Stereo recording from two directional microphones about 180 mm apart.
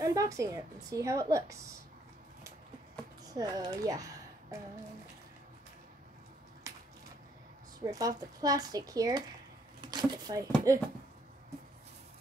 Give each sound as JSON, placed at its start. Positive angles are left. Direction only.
{"t": 0.0, "sound": "a woman's voice", "side_deg": -20}
{"t": 3.3, "sound": "a woman's voice", "side_deg": -20}
{"t": 6.7, "sound": "a sound", "side_deg": -20}
{"t": 7.8, "sound": "a woman's voice", "side_deg": -20}